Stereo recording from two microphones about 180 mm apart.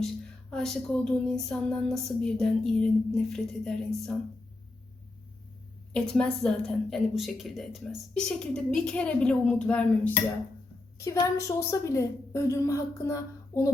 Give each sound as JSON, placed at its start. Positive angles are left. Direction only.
{"t": 0.5, "sound": "a woman's voice", "side_deg": 0}
{"t": 5.9, "sound": "a woman's voice", "side_deg": 5}